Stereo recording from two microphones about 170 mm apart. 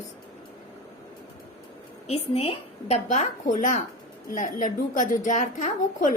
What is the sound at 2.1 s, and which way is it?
A woman's voice, 35° left (ahead or behind).